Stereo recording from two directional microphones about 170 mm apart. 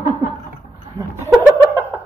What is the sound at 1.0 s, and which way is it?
Speech, 20° right (ahead or behind).